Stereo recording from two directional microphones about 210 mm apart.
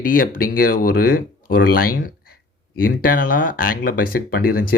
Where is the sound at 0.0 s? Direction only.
40° left (ahead or behind).